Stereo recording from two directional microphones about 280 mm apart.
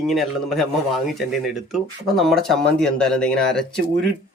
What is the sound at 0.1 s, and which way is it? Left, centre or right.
Speech, centre.